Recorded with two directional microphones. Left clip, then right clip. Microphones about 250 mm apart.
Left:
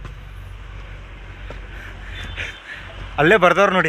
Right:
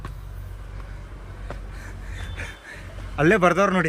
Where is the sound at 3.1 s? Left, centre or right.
Centre.